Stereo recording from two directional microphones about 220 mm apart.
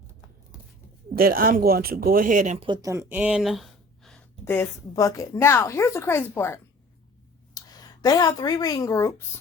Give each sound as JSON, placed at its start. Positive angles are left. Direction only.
{"t": 1.1, "sound": "speech", "side_deg": -40}
{"t": 2.6, "sound": "speech", "side_deg": -20}